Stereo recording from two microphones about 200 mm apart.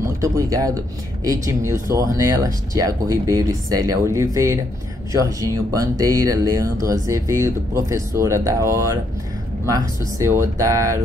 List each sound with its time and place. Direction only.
0.2 s speech: 15° right (ahead or behind)